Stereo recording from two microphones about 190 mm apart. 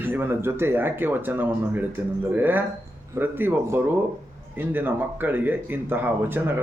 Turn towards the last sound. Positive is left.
turn(degrees=-10)  # may be behind; listen again after turning